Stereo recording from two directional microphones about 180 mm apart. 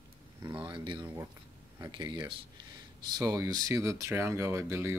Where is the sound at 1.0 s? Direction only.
15° right (ahead or behind).